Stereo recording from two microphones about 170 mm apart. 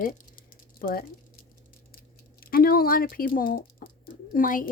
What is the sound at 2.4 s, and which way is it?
Speech, 60° left (ahead or behind).